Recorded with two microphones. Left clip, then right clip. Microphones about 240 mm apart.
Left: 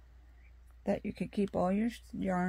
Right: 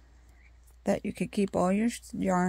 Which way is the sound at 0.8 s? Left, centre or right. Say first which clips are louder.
Right 5 dB; right.